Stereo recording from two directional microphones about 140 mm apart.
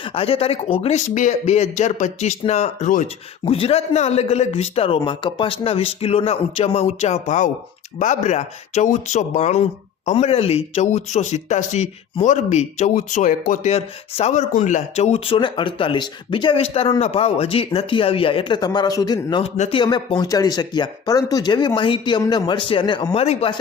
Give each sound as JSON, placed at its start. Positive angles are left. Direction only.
{"t": 0.0, "sound": "a man's voice", "side_deg": 40}
{"t": 3.4, "sound": "a man's voice", "side_deg": 45}
{"t": 13.7, "sound": "a man's voice", "side_deg": 45}
{"t": 14.3, "sound": "speech", "side_deg": 60}
{"t": 19.4, "sound": "a man's voice", "side_deg": 50}
{"t": 19.8, "sound": "speech", "side_deg": 30}
{"t": 23.1, "sound": "a man's voice", "side_deg": 50}